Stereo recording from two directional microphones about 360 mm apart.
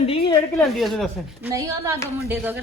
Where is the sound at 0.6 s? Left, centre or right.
Centre.